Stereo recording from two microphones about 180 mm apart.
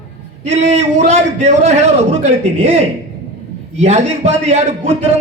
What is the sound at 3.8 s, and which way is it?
A man's voice, 40° right (ahead or behind).